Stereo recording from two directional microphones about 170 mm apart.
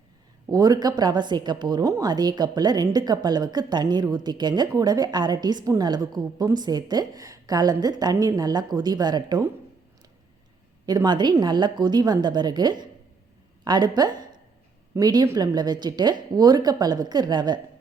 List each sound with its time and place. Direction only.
0.4 s a woman's voice: 20° right (ahead or behind)
10.8 s a woman's voice: 25° right (ahead or behind)